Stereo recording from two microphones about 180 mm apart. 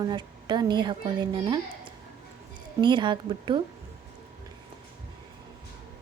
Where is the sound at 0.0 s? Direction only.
25° right (ahead or behind).